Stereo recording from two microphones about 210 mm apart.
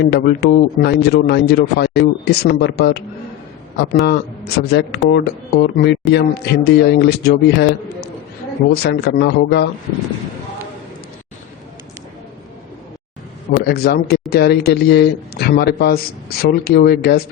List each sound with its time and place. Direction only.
0.0 s speech: 50° left (ahead or behind)
4.0 s speech: 50° left (ahead or behind)
13.5 s speech: 50° left (ahead or behind)